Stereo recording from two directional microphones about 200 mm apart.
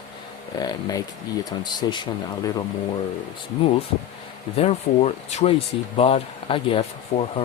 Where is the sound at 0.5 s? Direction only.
20° left (ahead or behind).